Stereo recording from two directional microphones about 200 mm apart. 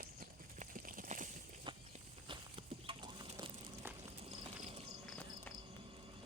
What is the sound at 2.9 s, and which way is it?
Chicken, 20° right (ahead or behind).